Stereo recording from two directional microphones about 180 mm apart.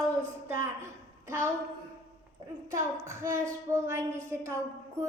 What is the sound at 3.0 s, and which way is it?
A woman's voice, 15° right (ahead or behind).